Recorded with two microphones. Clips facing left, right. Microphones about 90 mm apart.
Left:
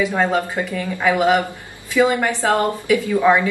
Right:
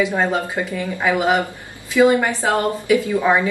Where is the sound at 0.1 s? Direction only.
20° right (ahead or behind).